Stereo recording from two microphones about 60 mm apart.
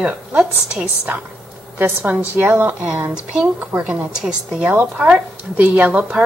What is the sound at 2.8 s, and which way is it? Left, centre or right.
A woman's voice, centre.